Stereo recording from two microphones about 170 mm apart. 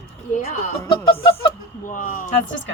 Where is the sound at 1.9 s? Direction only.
55° left (ahead or behind).